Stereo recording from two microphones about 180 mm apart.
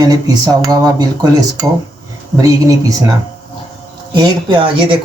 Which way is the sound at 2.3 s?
20° right (ahead or behind).